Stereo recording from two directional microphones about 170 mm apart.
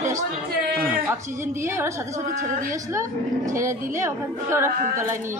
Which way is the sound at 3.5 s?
15° right (ahead or behind).